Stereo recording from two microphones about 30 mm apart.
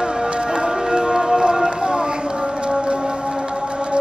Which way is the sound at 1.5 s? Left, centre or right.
Right.